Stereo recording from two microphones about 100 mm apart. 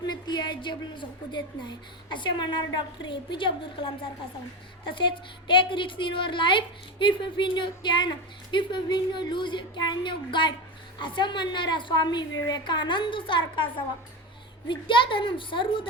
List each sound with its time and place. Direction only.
0.0 s a woman's voice: 45° left (ahead or behind)